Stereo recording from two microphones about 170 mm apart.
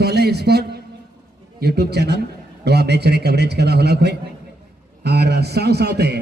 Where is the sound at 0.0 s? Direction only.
75° right (ahead or behind).